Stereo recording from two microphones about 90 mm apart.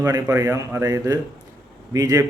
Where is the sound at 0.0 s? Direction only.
40° right (ahead or behind).